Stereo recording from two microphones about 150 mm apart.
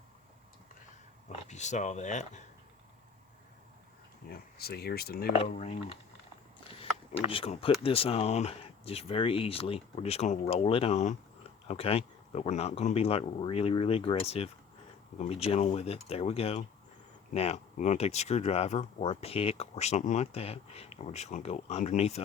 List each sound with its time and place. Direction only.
1.3 s speech: 50° left (ahead or behind)
4.3 s speech: 90° left
5.5 s speech: 45° left (ahead or behind)
7.3 s speech: 40° left (ahead or behind)